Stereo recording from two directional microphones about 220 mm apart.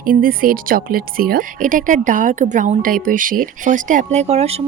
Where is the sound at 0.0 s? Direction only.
40° right (ahead or behind).